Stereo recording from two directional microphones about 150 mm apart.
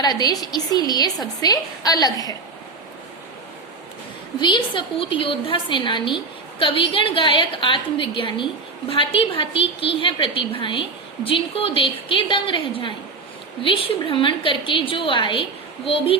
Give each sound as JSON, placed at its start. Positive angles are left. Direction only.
{"t": 0.0, "sound": "a woman's voice", "side_deg": 25}
{"t": 4.4, "sound": "a woman's voice", "side_deg": 30}